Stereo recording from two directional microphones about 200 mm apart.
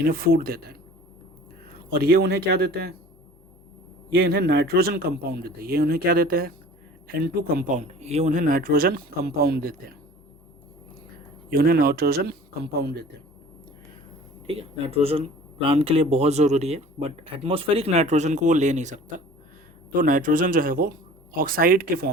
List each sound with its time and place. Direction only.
0.0 s a man's voice: 50° right (ahead or behind)
1.9 s a man's voice: 55° right (ahead or behind)
4.2 s a man's voice: 55° right (ahead or behind)
7.8 s a man's voice: 35° right (ahead or behind); by 9.7 s 50° right (ahead or behind)
11.5 s a man's voice: 50° right (ahead or behind)
14.4 s a man's voice: 30° right (ahead or behind); by 22.1 s 45° right (ahead or behind)